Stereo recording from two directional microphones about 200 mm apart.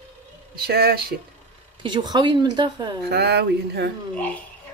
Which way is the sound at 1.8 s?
20° right (ahead or behind).